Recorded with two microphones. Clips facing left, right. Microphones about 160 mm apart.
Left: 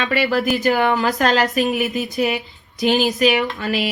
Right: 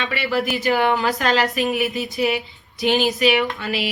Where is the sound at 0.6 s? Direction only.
45° left (ahead or behind).